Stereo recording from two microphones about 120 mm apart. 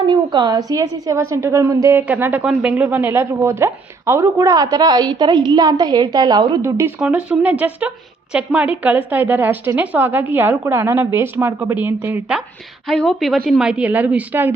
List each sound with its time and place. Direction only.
0.1 s a woman's voice: 40° right (ahead or behind)
6.6 s a woman's voice: 25° right (ahead or behind)
7.0 s a woman's voice: 10° right (ahead or behind)
12.9 s a woman's voice: 5° left (ahead or behind); by 14.5 s 15° right (ahead or behind)